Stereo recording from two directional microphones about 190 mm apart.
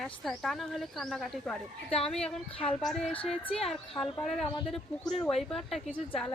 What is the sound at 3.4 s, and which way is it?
Speech, 30° left (ahead or behind).